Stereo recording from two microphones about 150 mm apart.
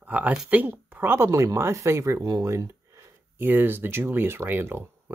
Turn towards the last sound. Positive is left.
turn(degrees=-15)  # may be behind; listen again after turning